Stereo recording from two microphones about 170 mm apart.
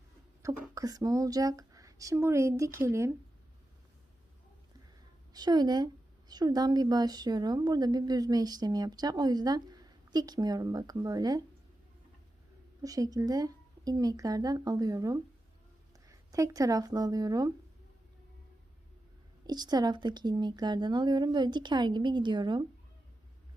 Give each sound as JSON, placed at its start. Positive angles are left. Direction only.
{"t": 0.7, "sound": "a woman's voice", "side_deg": -20}
{"t": 5.3, "sound": "a woman's voice", "side_deg": -25}
{"t": 12.8, "sound": "a woman's voice", "side_deg": -20}
{"t": 19.5, "sound": "a woman's voice", "side_deg": -25}